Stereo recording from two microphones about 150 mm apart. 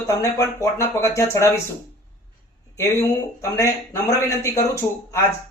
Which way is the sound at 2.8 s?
20° left (ahead or behind).